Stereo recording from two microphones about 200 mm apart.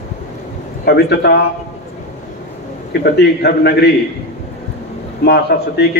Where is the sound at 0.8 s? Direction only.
55° left (ahead or behind).